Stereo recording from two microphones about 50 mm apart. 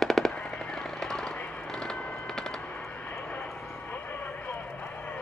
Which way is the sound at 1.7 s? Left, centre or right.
Centre.